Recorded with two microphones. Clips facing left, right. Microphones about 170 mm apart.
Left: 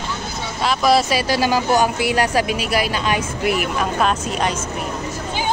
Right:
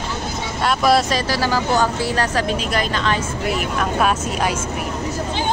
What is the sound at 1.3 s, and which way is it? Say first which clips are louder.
Speech: left 3 dB; 15° left (ahead or behind).